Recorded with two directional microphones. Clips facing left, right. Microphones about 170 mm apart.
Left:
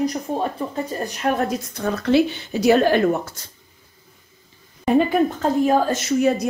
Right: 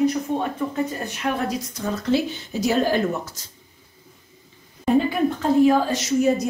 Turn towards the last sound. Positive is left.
turn(degrees=55)  # may be behind; listen again after turning